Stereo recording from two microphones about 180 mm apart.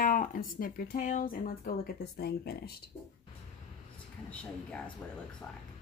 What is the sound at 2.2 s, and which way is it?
Speech, 60° left (ahead or behind).